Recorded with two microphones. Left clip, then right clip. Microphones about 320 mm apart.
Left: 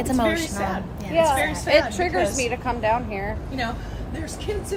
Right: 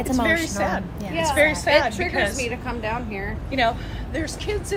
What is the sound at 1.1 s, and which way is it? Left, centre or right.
Speech, left.